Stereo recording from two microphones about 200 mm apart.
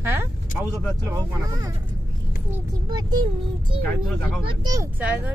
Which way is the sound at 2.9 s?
20° right (ahead or behind).